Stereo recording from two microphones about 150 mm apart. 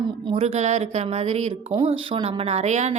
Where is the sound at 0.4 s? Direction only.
50° right (ahead or behind).